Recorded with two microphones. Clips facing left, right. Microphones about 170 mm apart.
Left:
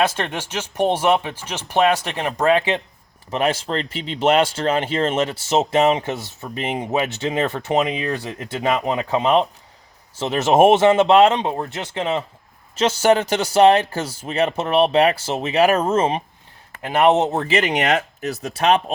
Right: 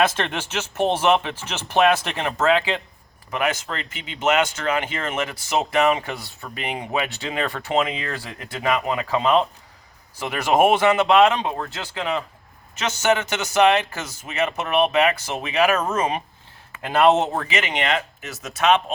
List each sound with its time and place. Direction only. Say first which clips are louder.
0.0 s speech: even; 10° left (ahead or behind)
3.2 s speech: left 4 dB; 30° left (ahead or behind)